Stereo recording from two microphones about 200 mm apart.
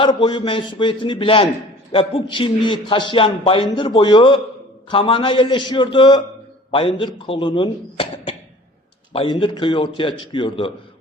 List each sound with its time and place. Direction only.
0.0 s a man's voice: 25° left (ahead or behind)